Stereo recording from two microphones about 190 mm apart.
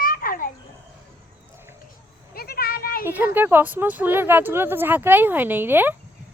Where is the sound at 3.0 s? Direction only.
10° right (ahead or behind).